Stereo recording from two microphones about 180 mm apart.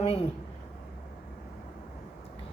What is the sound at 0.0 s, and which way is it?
Speech, 35° left (ahead or behind).